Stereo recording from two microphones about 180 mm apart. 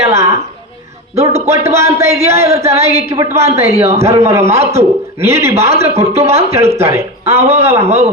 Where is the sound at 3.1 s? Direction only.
25° right (ahead or behind).